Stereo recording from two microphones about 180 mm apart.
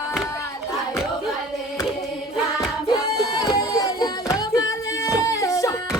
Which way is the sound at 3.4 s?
20° left (ahead or behind).